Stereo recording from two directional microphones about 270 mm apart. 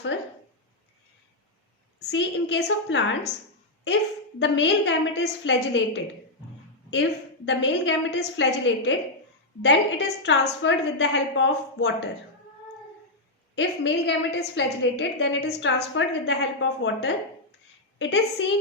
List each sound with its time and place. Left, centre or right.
2.0 s a woman's voice: left
4.4 s a woman's voice: left
7.4 s a woman's voice: left
13.6 s a woman's voice: left